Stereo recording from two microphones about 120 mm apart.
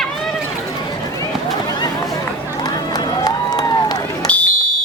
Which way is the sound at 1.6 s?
35° left (ahead or behind).